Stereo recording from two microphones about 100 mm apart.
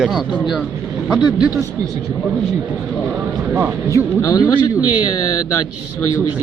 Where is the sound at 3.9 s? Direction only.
35° left (ahead or behind).